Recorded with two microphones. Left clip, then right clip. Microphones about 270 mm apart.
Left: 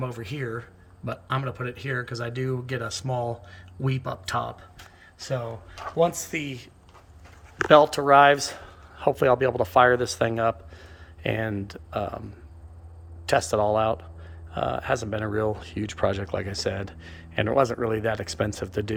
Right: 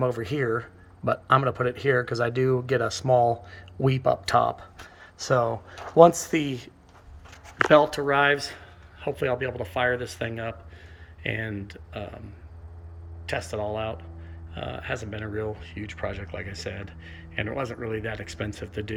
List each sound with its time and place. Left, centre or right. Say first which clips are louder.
0.0 s speech: right 7 dB; centre
7.7 s speech: left 4 dB; centre
13.2 s speech: left 8 dB; left